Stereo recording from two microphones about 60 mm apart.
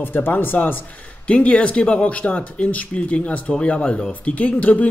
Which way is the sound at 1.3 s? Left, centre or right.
Centre.